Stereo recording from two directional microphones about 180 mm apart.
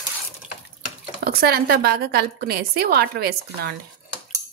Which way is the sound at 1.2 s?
60° right (ahead or behind).